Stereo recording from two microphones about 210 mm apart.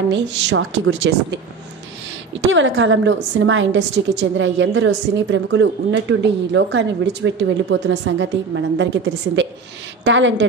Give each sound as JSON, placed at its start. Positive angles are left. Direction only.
{"t": 0.1, "sound": "a woman's voice", "side_deg": -60}